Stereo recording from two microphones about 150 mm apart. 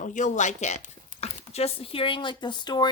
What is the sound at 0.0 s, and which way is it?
A woman's voice, 55° left (ahead or behind).